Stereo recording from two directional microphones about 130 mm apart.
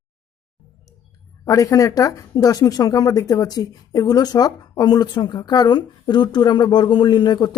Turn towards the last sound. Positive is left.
turn(degrees=35)  # may be behind; listen again after turning